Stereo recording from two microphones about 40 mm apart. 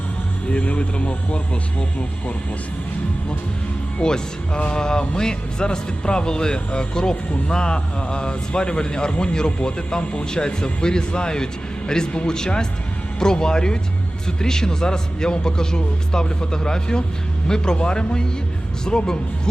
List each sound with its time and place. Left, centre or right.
0.5 s speech: left
4.0 s speech: centre
10.3 s speech: left